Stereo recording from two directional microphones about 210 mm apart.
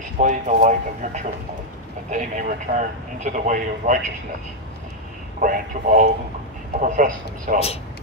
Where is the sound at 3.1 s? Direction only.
35° right (ahead or behind).